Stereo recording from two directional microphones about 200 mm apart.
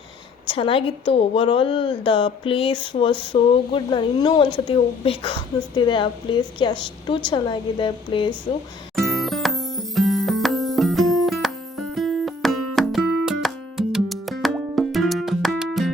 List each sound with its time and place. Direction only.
0.4 s a woman's voice: 25° left (ahead or behind)
9.0 s music: centre (ahead or behind)